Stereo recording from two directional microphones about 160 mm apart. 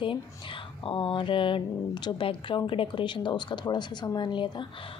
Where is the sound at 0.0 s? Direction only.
30° left (ahead or behind).